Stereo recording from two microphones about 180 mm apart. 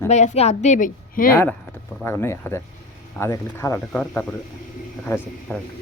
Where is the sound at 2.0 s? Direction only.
15° left (ahead or behind).